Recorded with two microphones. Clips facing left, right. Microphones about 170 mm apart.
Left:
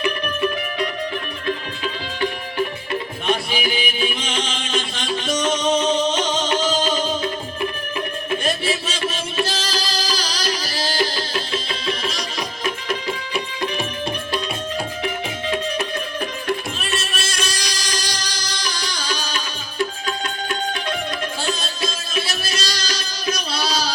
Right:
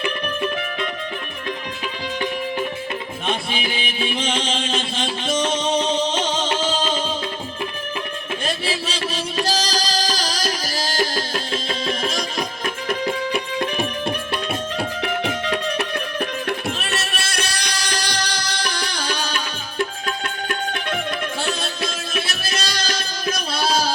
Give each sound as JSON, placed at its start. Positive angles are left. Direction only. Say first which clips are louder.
{"t": 3.5, "sound": "music", "louder": "left 3 dB", "side_deg": -25}
{"t": 8.6, "sound": "music", "louder": "left 2 dB", "side_deg": -30}
{"t": 14.8, "sound": "music", "louder": "right 2 dB", "side_deg": -65}